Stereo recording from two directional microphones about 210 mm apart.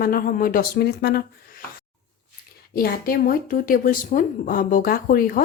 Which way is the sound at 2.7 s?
45° left (ahead or behind).